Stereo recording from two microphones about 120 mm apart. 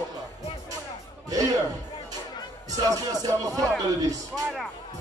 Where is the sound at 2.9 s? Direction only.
30° right (ahead or behind).